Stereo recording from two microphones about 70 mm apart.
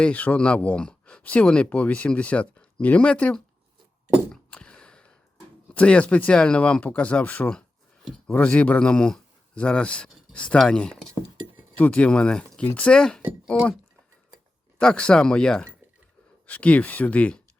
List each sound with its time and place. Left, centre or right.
0.0 s speech: centre
4.3 s a sound: centre
5.7 s speech: centre
13.5 s speech: left
14.8 s speech: centre